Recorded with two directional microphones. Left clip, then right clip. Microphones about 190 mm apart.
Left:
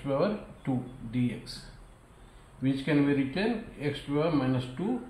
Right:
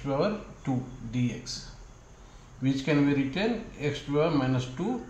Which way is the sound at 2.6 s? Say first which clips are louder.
Right 1 dB; 10° right (ahead or behind).